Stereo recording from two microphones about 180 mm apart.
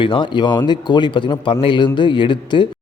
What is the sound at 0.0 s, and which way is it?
Speech, 25° left (ahead or behind).